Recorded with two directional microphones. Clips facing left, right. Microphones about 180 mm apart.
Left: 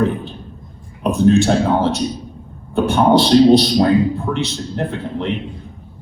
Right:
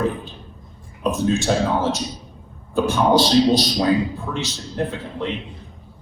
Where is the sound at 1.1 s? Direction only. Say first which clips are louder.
Left 8 dB; 60° left (ahead or behind).